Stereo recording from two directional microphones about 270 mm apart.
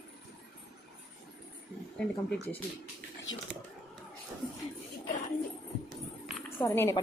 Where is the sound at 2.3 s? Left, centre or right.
Centre.